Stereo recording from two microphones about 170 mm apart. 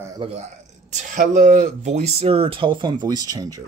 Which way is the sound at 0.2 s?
30° right (ahead or behind).